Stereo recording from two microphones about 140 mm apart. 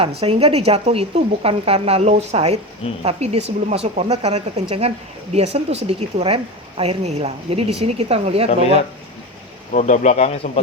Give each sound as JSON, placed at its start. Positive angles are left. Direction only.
{"t": 0.0, "sound": "a woman's voice", "side_deg": -45}
{"t": 9.7, "sound": "speech", "side_deg": 60}